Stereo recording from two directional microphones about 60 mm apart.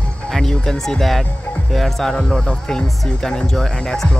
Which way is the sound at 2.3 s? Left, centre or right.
Centre.